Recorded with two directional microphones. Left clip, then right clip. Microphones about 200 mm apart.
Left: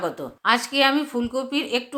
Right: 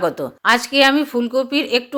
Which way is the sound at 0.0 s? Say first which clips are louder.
Right 6 dB; 25° right (ahead or behind).